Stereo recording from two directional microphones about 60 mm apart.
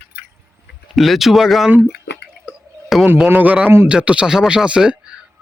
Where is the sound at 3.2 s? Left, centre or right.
Right.